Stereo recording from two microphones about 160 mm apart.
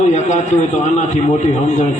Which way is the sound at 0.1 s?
45° left (ahead or behind).